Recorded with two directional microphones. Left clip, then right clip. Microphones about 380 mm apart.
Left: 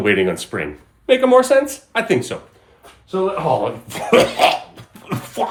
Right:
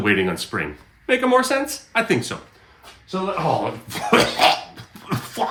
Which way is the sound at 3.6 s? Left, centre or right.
Centre.